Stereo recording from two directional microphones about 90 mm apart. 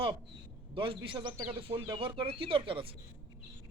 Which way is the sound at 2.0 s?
80° right.